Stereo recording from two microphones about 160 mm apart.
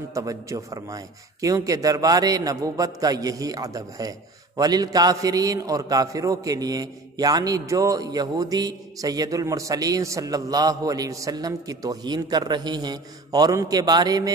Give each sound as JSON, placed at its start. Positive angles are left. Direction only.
{"t": 0.1, "sound": "a man's voice", "side_deg": -20}